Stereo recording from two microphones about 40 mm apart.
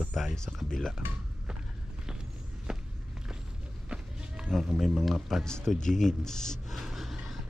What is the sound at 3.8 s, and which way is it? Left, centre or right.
Run, right.